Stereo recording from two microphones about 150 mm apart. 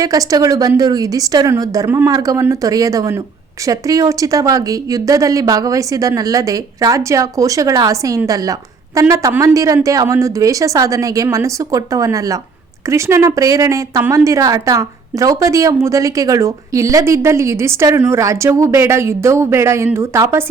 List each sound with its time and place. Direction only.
0.0 s a woman's voice: 25° right (ahead or behind)